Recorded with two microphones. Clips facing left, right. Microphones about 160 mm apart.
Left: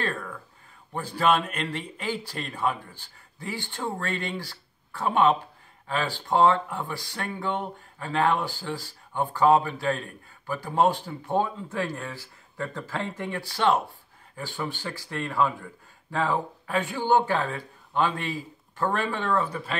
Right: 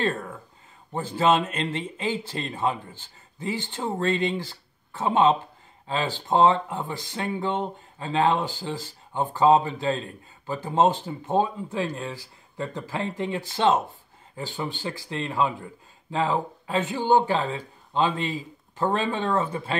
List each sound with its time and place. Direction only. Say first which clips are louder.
0.0 s speech: right 4 dB; 25° right (ahead or behind)